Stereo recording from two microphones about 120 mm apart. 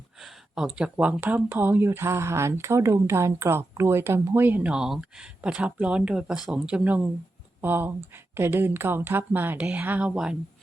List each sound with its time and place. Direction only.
0.2 s speech: 5° right (ahead or behind)